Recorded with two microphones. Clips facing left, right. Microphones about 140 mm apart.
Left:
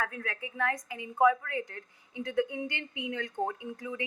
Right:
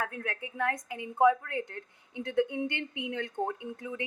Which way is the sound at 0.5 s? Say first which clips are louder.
Even; 55° right (ahead or behind).